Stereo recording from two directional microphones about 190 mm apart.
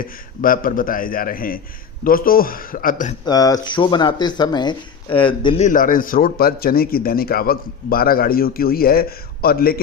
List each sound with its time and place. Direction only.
0.0 s a man's voice: 50° left (ahead or behind)
3.2 s speech: 20° left (ahead or behind)
5.6 s a man's voice: 45° left (ahead or behind)